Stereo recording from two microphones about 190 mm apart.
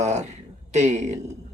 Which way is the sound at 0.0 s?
35° right (ahead or behind).